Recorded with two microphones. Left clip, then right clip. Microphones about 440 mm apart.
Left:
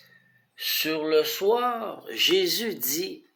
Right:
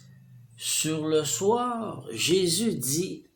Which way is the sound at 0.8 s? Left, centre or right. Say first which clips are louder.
Left 3 dB; centre.